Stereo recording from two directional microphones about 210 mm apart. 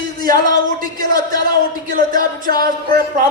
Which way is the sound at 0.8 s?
40° right (ahead or behind).